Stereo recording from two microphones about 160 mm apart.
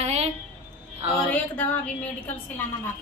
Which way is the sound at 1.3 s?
10° left (ahead or behind).